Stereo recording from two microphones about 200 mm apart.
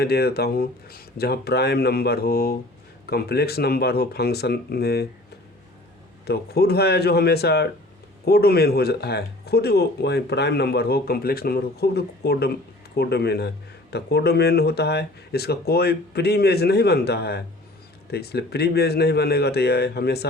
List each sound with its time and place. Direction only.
0.0 s speech: 50° left (ahead or behind)
6.2 s speech: 50° left (ahead or behind)